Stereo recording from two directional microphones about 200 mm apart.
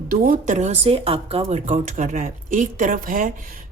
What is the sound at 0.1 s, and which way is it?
Speech, 40° right (ahead or behind).